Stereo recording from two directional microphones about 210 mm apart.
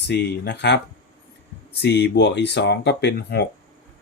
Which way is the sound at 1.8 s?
55° left (ahead or behind).